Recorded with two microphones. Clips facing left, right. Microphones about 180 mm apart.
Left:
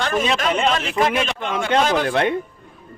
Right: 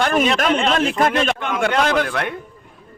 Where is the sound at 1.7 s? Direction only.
25° left (ahead or behind).